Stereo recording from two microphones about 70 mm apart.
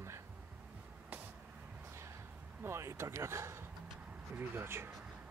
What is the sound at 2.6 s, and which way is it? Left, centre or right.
Speech, right.